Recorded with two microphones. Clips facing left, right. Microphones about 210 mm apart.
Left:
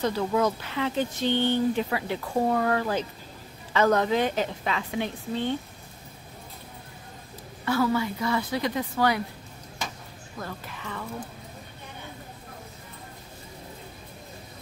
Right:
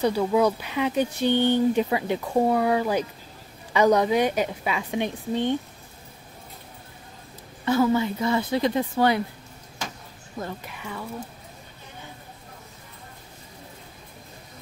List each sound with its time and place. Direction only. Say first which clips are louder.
0.0 s speech: right 4 dB; 15° right (ahead or behind)
7.6 s a woman's voice: right 4 dB; 20° right (ahead or behind)
10.4 s speech: right 3 dB; 10° right (ahead or behind)